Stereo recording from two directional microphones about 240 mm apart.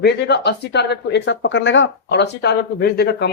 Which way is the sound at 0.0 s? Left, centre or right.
Left.